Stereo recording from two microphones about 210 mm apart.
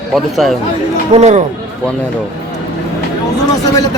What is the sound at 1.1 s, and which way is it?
Speech, 30° right (ahead or behind).